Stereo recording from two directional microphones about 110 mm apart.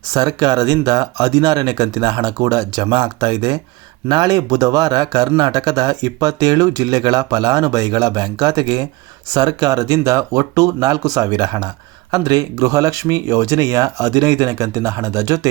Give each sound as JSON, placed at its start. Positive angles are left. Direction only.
{"t": 0.1, "sound": "speech", "side_deg": -35}